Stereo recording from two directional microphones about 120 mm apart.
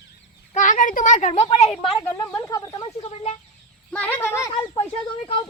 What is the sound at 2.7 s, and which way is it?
Speech, 40° left (ahead or behind).